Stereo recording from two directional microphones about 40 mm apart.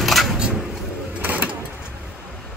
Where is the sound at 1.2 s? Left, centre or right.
Right.